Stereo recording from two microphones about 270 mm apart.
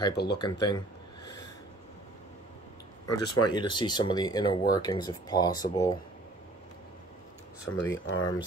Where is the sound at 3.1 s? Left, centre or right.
Left.